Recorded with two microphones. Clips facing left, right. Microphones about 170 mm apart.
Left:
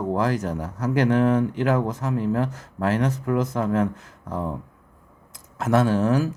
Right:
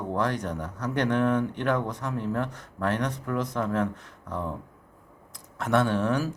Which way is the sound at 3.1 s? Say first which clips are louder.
Left 6 dB; 25° left (ahead or behind).